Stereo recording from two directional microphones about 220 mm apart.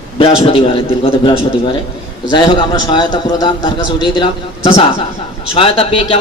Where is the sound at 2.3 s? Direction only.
20° left (ahead or behind).